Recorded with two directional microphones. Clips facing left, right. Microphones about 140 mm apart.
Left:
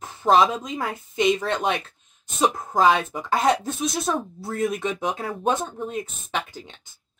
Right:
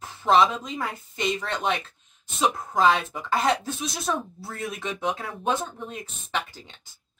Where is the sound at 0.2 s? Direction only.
40° left (ahead or behind).